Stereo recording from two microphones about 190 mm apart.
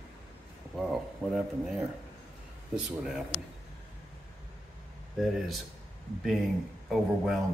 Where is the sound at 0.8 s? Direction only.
Centre (ahead or behind).